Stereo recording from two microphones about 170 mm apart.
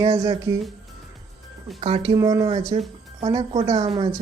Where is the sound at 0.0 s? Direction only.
25° right (ahead or behind).